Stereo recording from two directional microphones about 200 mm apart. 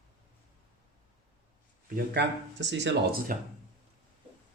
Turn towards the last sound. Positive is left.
turn(degrees=-50)  # may be behind; listen again after turning